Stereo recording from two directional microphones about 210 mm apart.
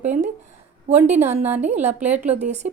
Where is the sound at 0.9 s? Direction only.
35° right (ahead or behind).